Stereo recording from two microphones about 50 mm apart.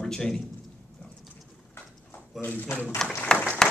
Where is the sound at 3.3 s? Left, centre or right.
Left.